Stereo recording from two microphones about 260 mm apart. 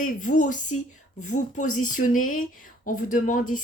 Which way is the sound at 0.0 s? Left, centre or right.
Left.